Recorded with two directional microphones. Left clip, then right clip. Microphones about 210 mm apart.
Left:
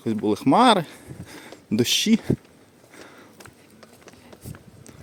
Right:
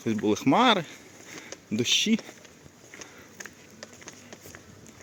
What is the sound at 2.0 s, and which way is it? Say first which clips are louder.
Speech: left 4 dB; 35° left (ahead or behind).